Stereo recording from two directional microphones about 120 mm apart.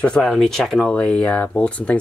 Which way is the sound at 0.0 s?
5° left (ahead or behind).